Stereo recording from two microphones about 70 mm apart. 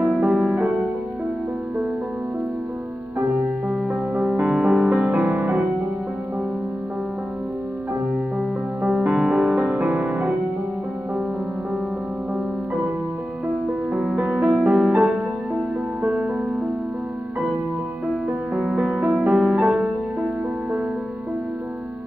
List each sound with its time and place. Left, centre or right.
0.0 s music: centre
3.2 s music: right
3.6 s music: centre; by 5.7 s right
8.4 s music: centre
13.9 s music: centre
18.6 s music: centre